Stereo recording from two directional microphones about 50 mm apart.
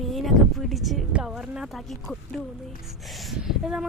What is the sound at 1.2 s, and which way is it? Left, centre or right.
Speech, centre.